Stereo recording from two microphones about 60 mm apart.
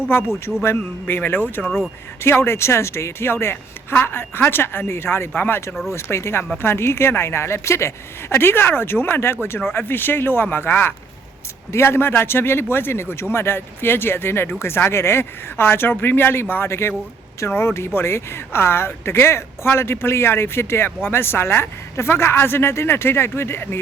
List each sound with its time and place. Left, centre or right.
0.1 s speech: left
1.6 s speech: centre
2.2 s speech: left
5.9 s speech: left